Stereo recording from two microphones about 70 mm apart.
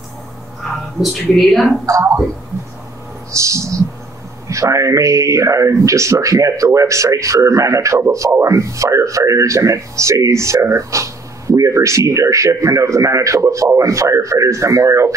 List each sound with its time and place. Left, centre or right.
0.9 s a woman's voice: centre
1.9 s a man's voice: right
3.3 s a man's voice: right